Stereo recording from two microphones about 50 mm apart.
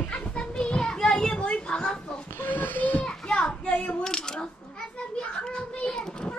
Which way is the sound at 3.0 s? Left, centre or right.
Left.